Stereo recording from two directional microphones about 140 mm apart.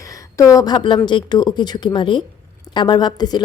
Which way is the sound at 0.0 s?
25° left (ahead or behind).